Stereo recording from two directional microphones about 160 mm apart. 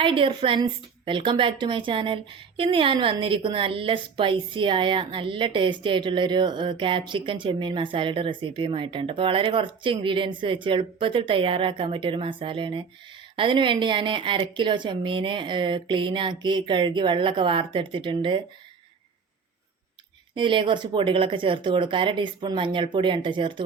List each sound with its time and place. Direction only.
0.0 s a woman's voice: 30° right (ahead or behind)
20.3 s a woman's voice: 30° right (ahead or behind)